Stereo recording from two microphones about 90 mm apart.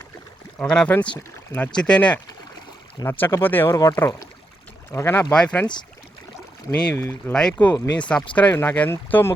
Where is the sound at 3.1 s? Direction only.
25° left (ahead or behind).